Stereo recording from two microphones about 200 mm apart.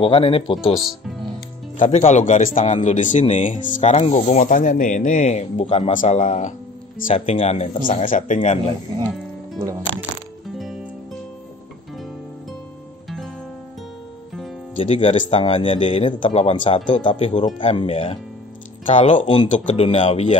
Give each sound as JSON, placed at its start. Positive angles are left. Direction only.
{"t": 0.0, "sound": "speech", "side_deg": 25}
{"t": 1.8, "sound": "speech", "side_deg": 35}
{"t": 8.4, "sound": "speech", "side_deg": 25}
{"t": 14.8, "sound": "speech", "side_deg": 30}